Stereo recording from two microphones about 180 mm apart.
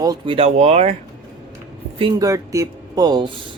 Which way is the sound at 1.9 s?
25° right (ahead or behind).